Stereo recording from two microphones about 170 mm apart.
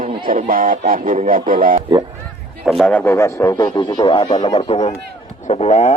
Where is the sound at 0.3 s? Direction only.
55° right (ahead or behind).